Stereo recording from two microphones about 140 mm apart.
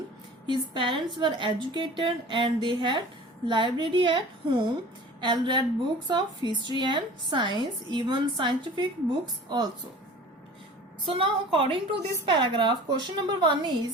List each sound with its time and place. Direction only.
0.4 s a woman's voice: 35° right (ahead or behind)
11.0 s a woman's voice: 40° right (ahead or behind)